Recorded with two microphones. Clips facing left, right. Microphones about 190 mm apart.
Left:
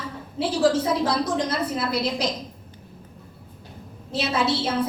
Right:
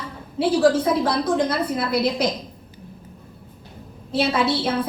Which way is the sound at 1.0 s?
55° right (ahead or behind).